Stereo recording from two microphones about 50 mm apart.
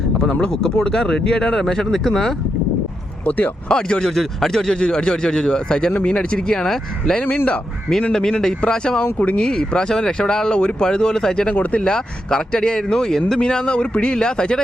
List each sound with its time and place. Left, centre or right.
0.2 s speech: centre
3.2 s speech: left
3.7 s speech: centre
7.3 s speech: left
8.1 s speech: centre